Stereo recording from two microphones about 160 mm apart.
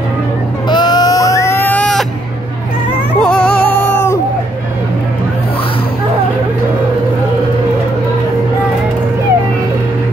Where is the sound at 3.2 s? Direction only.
10° left (ahead or behind).